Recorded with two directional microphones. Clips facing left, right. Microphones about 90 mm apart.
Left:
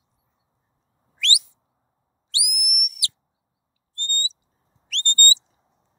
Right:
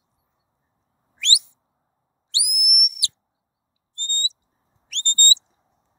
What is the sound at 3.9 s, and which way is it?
Owl, 20° right (ahead or behind).